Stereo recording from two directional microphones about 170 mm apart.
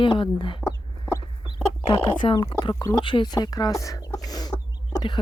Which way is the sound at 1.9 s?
30° left (ahead or behind).